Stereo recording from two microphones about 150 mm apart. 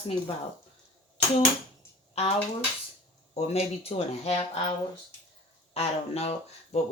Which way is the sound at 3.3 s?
45° left (ahead or behind).